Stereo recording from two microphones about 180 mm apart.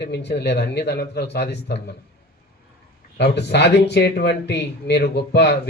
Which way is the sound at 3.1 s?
70° left (ahead or behind).